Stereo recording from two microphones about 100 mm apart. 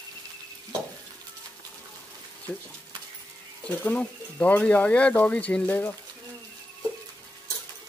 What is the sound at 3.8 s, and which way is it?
Speech, 15° left (ahead or behind).